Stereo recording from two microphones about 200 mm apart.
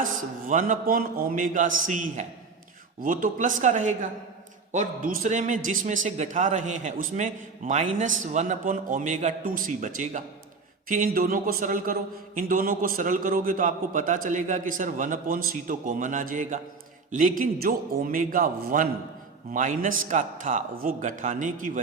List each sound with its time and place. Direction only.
0.0 s a man's voice: 40° right (ahead or behind)